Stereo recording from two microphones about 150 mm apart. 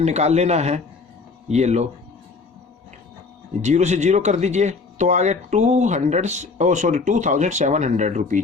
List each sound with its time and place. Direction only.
0.0 s speech: 45° right (ahead or behind)
3.6 s speech: 50° right (ahead or behind)